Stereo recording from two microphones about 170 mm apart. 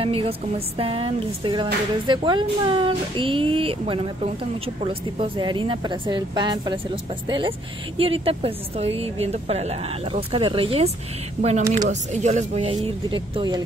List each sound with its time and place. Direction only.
0.0 s speech: 35° right (ahead or behind)